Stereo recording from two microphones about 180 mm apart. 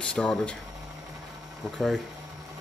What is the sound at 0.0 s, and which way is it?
Speech, 5° left (ahead or behind).